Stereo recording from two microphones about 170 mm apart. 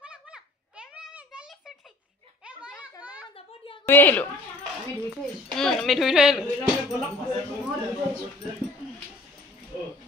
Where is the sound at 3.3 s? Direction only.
35° left (ahead or behind).